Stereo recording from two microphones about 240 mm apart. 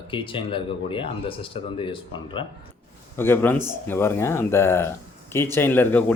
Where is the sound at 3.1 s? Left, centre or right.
Centre.